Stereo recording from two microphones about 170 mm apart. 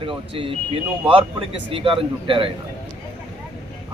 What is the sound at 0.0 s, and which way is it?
Speech, 30° right (ahead or behind).